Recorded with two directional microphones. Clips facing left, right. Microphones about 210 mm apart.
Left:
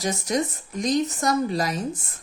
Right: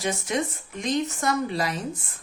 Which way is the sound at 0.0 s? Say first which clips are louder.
Left 2 dB; 40° left (ahead or behind).